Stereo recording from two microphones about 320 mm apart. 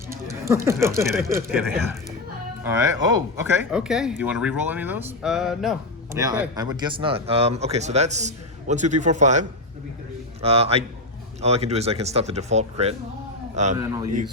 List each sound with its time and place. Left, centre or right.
0.1 s speech: centre